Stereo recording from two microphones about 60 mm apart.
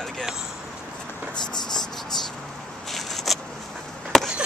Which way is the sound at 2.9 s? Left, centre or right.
Centre.